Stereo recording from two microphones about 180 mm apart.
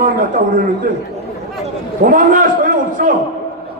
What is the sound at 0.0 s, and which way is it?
Speech, 50° right (ahead or behind).